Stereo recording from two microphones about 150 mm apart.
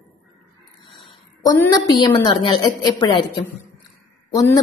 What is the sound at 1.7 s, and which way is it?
A woman's voice, 30° left (ahead or behind).